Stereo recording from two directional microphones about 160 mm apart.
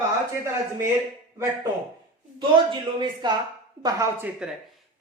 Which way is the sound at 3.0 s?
25° right (ahead or behind).